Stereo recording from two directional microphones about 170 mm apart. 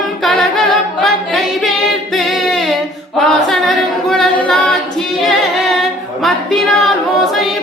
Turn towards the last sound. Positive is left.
turn(degrees=0)  # may be behind; listen again after turning